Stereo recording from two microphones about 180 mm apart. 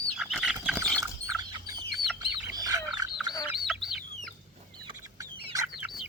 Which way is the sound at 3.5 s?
Centre (ahead or behind).